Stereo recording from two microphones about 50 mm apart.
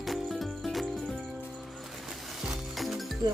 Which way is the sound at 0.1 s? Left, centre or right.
Centre.